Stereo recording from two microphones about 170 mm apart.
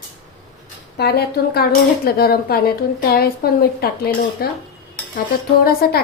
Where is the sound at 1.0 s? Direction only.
70° left (ahead or behind).